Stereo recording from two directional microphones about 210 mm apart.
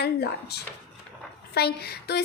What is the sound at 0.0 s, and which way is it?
A woman's voice, 50° left (ahead or behind).